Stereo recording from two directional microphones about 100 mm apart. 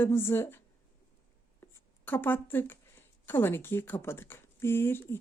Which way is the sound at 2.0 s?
20° left (ahead or behind).